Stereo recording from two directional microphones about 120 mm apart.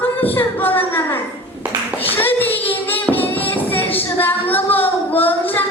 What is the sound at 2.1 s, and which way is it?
Music, 15° left (ahead or behind).